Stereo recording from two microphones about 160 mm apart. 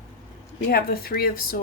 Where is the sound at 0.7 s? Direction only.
70° left (ahead or behind).